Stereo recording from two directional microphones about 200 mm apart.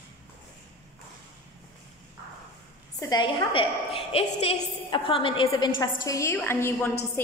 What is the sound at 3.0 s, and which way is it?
A woman's voice, 20° left (ahead or behind).